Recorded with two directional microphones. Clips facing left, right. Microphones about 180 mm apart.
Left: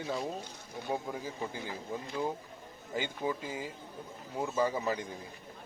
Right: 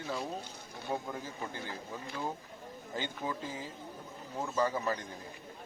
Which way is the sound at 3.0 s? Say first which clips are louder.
Left 3 dB; 10° left (ahead or behind).